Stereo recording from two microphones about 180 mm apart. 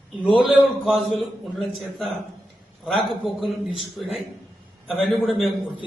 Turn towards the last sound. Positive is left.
turn(degrees=0)  # may be behind; listen again after turning